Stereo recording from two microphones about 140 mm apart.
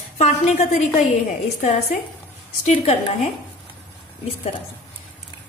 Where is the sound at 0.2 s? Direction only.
55° left (ahead or behind).